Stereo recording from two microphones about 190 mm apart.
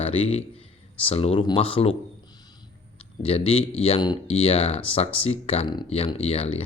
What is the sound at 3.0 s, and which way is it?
Speech, 30° left (ahead or behind).